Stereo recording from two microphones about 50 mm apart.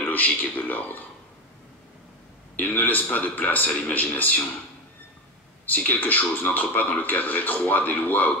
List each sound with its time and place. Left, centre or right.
0.0 s a man's voice: left
2.6 s a man's voice: left
5.7 s a man's voice: left